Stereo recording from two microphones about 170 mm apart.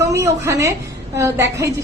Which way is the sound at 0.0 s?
15° right (ahead or behind).